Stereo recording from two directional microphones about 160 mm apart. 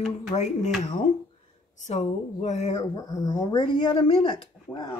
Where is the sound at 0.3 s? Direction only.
45° left (ahead or behind).